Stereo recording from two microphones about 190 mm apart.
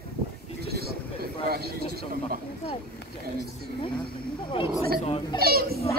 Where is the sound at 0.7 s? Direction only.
55° right (ahead or behind).